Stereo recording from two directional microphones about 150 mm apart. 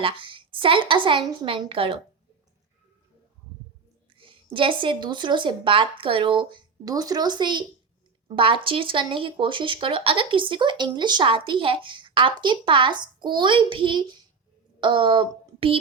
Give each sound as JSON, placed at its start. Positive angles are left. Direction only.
{"t": 0.0, "sound": "speech", "side_deg": -35}
{"t": 4.2, "sound": "a woman's voice", "side_deg": -35}